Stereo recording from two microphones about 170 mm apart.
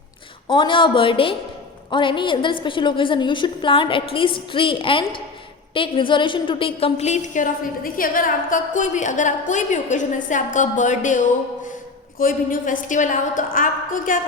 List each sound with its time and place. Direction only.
0.4 s a woman's voice: 30° left (ahead or behind)
7.9 s a woman's voice: 55° left (ahead or behind)
12.2 s a woman's voice: 55° left (ahead or behind)